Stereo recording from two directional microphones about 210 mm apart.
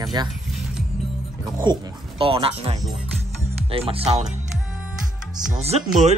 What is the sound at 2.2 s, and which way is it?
Speech, 25° right (ahead or behind).